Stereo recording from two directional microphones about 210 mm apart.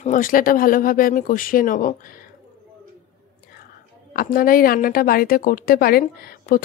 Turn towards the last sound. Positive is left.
turn(degrees=45)  # may be behind; listen again after turning